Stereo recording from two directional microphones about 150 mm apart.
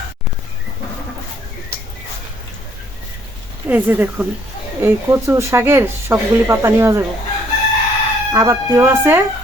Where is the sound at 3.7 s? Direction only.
10° right (ahead or behind).